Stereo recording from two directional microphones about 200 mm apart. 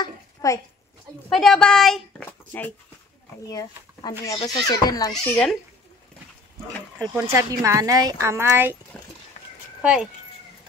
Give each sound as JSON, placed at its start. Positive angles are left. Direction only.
{"t": 0.0, "sound": "a sound", "side_deg": 15}
{"t": 1.3, "sound": "a child's voice", "side_deg": 0}
{"t": 5.1, "sound": "a child's voice", "side_deg": 5}
{"t": 7.3, "sound": "a woman's voice", "side_deg": -15}
{"t": 8.9, "sound": "dog", "side_deg": 5}
{"t": 9.8, "sound": "speech", "side_deg": -5}